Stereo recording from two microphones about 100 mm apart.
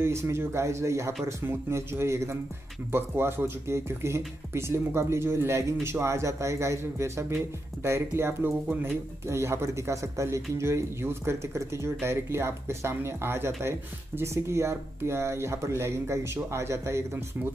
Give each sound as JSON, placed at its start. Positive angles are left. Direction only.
{"t": 0.0, "sound": "speech", "side_deg": -25}